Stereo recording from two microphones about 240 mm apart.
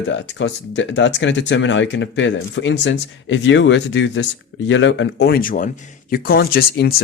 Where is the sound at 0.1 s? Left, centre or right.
Left.